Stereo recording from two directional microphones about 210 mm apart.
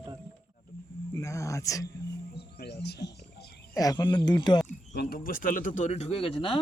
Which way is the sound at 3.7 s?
15° left (ahead or behind).